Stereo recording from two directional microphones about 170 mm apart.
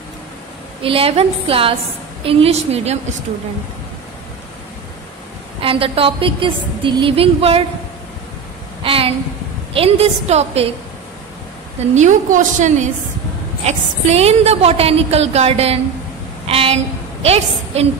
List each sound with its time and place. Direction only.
0.8 s a woman's voice: 35° right (ahead or behind)
5.6 s a woman's voice: 30° right (ahead or behind)
8.8 s a woman's voice: 35° right (ahead or behind)
11.9 s a woman's voice: 45° right (ahead or behind)
16.4 s a sound: 35° right (ahead or behind)
17.2 s a woman's voice: 35° right (ahead or behind)